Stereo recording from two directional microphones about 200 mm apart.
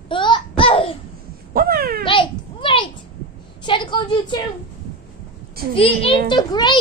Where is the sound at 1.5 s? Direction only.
50° right (ahead or behind).